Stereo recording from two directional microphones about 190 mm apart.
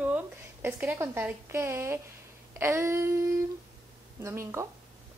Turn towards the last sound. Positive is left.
turn(degrees=-15)  # may be behind; listen again after turning